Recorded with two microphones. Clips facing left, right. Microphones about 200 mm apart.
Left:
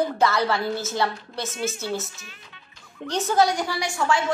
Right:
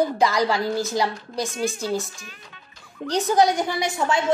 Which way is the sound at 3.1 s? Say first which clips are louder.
Right 2 dB; 15° right (ahead or behind).